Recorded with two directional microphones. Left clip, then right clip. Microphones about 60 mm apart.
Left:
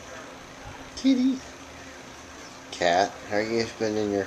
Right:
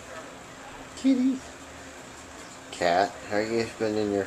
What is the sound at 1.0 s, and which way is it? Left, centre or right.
Speech, left.